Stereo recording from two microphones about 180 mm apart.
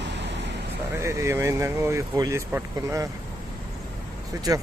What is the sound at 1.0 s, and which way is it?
Speech, 15° right (ahead or behind).